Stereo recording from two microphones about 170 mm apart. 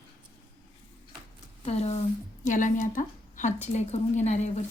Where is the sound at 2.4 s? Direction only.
50° left (ahead or behind).